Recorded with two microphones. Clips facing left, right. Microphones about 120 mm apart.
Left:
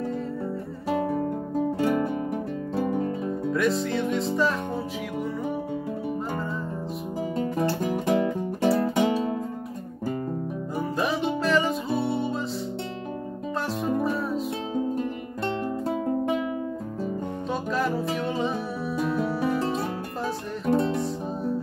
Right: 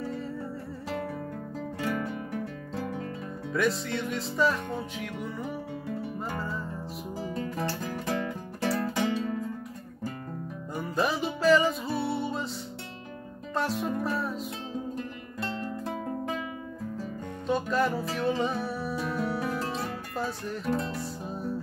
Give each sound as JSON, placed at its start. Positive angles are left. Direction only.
{"t": 1.8, "sound": "music", "side_deg": 35}
{"t": 2.3, "sound": "music", "side_deg": 20}
{"t": 3.5, "sound": "music", "side_deg": 0}
{"t": 7.3, "sound": "music", "side_deg": 20}
{"t": 10.8, "sound": "music", "side_deg": 0}
{"t": 13.6, "sound": "music", "side_deg": 0}
{"t": 17.5, "sound": "music", "side_deg": 0}
{"t": 20.6, "sound": "music", "side_deg": 30}